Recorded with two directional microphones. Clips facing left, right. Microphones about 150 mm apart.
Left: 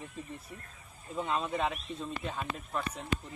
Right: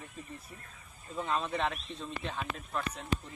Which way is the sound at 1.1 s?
10° left (ahead or behind).